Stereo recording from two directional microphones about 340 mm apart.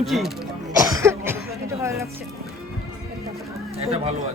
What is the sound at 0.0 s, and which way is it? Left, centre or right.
Speech, centre.